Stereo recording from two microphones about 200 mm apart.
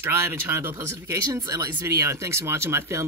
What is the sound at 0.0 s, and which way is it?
Speech, 15° right (ahead or behind).